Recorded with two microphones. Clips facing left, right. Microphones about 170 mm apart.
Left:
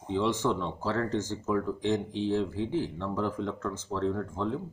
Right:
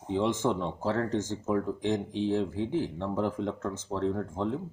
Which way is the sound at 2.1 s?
45° right (ahead or behind).